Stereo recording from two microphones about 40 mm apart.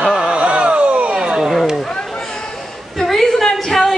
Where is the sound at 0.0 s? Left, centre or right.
Centre.